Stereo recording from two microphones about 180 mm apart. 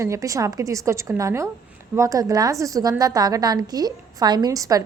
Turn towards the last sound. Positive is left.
turn(degrees=-20)  # may be behind; listen again after turning